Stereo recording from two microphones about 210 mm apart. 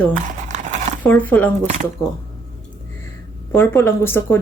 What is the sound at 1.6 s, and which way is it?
Speech, 35° right (ahead or behind).